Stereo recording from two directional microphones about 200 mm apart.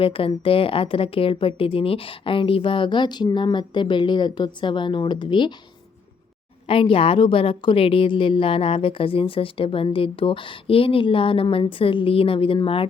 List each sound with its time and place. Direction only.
0.0 s a woman's voice: 25° left (ahead or behind)
6.7 s a woman's voice: 25° left (ahead or behind)